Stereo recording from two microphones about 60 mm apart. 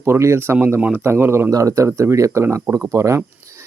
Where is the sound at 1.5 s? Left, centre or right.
Right.